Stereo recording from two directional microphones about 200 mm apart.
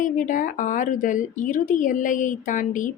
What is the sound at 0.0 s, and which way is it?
A woman's voice, 40° left (ahead or behind).